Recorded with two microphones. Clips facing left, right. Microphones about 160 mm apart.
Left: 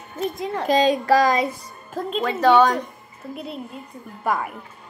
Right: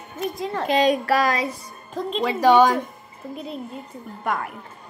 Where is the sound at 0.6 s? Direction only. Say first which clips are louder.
Left 2 dB; 30° left (ahead or behind).